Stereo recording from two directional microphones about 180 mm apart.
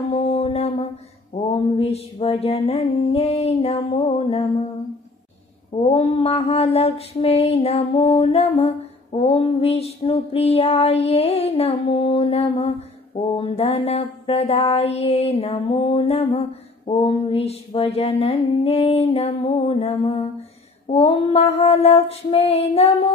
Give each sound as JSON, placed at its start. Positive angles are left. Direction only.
{"t": 0.1, "sound": "a sound", "side_deg": 35}
{"t": 1.3, "sound": "mantra", "side_deg": 35}
{"t": 5.8, "sound": "mantra", "side_deg": 30}